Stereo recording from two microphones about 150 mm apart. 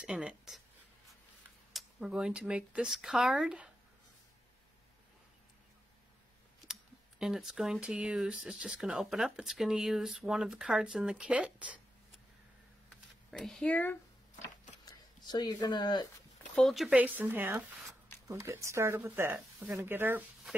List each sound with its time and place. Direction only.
0.0 s speech: 5° right (ahead or behind)
1.7 s speech: centre (ahead or behind)
6.7 s speech: 5° right (ahead or behind)
13.3 s speech: 5° left (ahead or behind)
14.9 s speech: 25° left (ahead or behind)
16.5 s speech: centre (ahead or behind)